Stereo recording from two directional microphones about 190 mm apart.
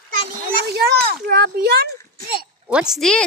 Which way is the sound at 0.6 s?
60° right (ahead or behind).